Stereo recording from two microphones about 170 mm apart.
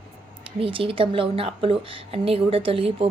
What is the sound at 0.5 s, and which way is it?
Speech, 30° right (ahead or behind).